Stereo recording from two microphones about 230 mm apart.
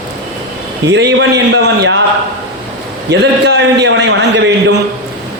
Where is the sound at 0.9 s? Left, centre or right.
Right.